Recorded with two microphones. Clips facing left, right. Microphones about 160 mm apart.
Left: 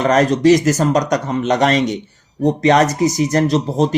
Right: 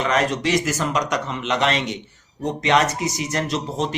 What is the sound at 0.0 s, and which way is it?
Speech, 40° left (ahead or behind).